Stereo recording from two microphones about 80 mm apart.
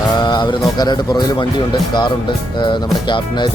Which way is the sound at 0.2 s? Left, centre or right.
Left.